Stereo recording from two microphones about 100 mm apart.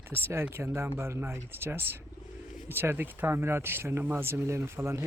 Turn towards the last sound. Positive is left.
turn(degrees=-30)  # may be behind; listen again after turning